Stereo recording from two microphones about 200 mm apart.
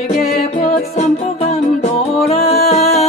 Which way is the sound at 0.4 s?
30° left (ahead or behind).